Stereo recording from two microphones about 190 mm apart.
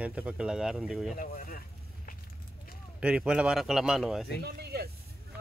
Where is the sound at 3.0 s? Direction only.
5° right (ahead or behind).